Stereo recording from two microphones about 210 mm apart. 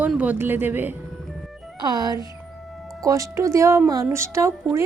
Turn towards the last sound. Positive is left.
turn(degrees=-15)  # may be behind; listen again after turning